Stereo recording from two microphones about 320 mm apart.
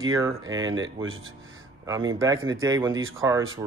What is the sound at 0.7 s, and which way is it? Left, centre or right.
Speech, right.